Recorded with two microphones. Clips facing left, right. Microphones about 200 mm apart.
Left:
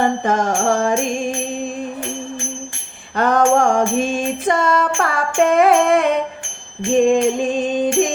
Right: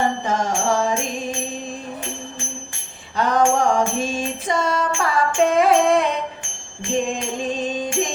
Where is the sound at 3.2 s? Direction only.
55° left (ahead or behind).